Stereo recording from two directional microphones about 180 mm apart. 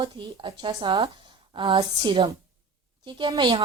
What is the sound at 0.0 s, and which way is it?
Speech, 25° right (ahead or behind).